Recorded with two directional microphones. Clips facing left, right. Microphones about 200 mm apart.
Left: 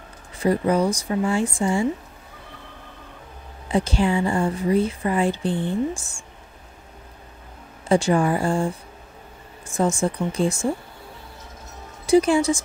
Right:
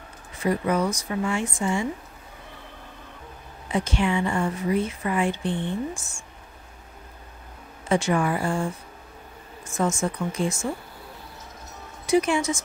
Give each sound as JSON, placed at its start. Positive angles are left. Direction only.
{"t": 0.4, "sound": "speech", "side_deg": 30}
{"t": 3.6, "sound": "speech", "side_deg": 35}
{"t": 7.9, "sound": "speech", "side_deg": 30}
{"t": 9.7, "sound": "speech", "side_deg": 30}
{"t": 12.1, "sound": "speech", "side_deg": 35}